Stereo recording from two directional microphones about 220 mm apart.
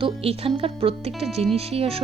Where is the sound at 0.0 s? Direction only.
25° right (ahead or behind).